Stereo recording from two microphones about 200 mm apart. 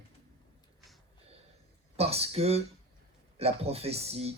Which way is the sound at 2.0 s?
30° right (ahead or behind).